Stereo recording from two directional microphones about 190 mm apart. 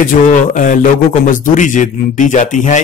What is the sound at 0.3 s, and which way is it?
Speech, 40° left (ahead or behind).